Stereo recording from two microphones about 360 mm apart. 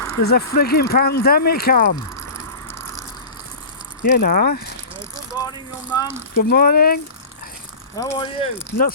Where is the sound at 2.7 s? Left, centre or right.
Centre.